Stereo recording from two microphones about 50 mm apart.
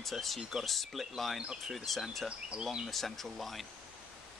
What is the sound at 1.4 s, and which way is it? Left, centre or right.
Speech, centre.